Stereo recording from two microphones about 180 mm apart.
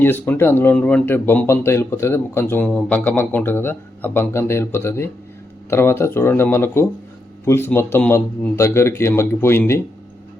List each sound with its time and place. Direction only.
0.0 s speech: 10° left (ahead or behind)